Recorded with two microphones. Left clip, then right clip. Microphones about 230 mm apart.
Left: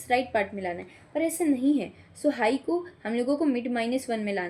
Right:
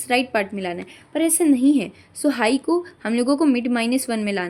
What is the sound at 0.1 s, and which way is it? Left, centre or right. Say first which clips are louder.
A woman's voice: right 5 dB; right.